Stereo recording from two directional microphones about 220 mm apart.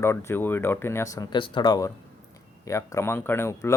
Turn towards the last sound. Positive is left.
turn(degrees=10)  # may be behind; listen again after turning